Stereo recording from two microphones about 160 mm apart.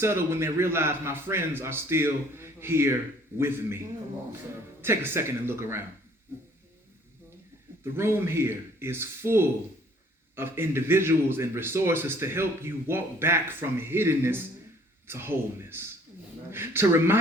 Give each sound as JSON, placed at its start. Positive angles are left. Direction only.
{"t": 0.0, "sound": "speech", "side_deg": -15}
{"t": 7.9, "sound": "speech", "side_deg": -15}